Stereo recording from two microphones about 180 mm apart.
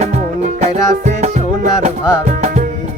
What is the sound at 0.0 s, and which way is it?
Music, 40° right (ahead or behind).